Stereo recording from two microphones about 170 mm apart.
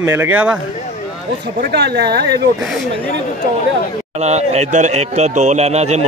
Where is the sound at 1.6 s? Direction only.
70° right (ahead or behind).